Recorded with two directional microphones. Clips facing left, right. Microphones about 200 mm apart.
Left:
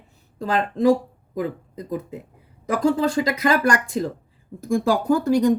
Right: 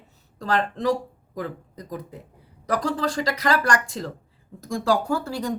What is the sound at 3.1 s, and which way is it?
Speech, 15° left (ahead or behind).